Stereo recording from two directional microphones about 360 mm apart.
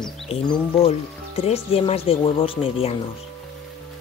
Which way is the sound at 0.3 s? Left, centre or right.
Centre.